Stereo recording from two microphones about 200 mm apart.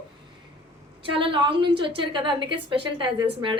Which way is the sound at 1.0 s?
25° right (ahead or behind).